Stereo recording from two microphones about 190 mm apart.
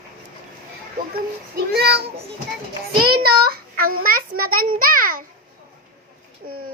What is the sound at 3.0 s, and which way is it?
A child's voice, 55° right (ahead or behind).